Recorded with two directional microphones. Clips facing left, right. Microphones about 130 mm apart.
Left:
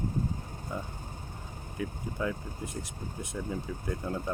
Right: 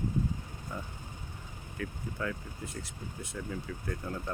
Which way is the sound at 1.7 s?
20° left (ahead or behind).